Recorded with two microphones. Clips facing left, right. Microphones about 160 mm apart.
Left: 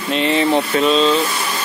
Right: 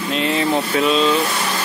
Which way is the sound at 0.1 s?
Centre (ahead or behind).